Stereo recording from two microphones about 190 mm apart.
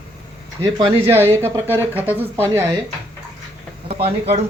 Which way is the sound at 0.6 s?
20° right (ahead or behind).